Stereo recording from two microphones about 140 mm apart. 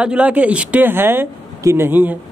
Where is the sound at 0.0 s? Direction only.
10° right (ahead or behind).